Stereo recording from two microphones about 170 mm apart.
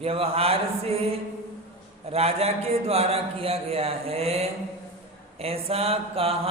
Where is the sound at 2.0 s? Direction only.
35° right (ahead or behind).